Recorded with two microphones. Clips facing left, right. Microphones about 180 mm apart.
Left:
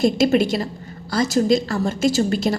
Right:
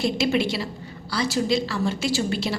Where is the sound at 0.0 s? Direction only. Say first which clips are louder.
Left 6 dB; 45° left (ahead or behind).